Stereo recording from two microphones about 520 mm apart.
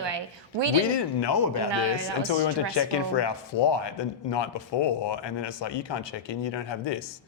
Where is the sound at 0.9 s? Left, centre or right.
Left.